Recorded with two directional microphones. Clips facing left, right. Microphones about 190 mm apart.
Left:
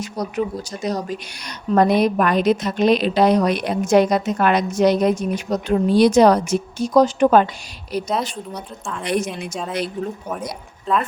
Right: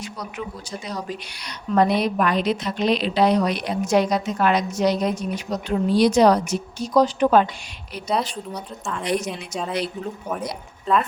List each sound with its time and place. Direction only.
0.0 s speech: 40° left (ahead or behind)
8.5 s a woman's voice: centre (ahead or behind)
9.0 s speech: 50° left (ahead or behind)
10.2 s speech: centre (ahead or behind)